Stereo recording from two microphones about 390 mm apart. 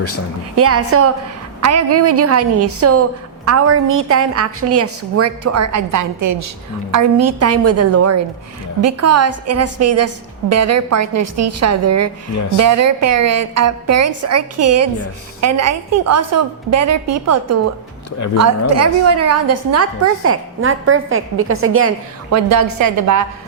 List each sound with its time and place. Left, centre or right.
0.5 s a woman's voice: right